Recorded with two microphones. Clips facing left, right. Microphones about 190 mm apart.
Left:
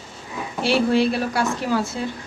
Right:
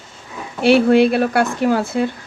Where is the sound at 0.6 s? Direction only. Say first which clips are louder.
Right 7 dB; 60° right (ahead or behind).